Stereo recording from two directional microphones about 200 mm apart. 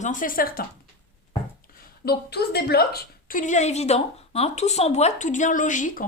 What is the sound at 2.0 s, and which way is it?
A woman's voice, 55° left (ahead or behind).